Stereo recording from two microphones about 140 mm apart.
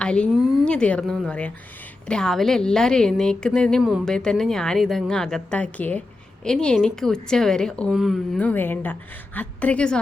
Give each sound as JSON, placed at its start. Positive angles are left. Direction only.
{"t": 0.0, "sound": "a woman's voice", "side_deg": 5}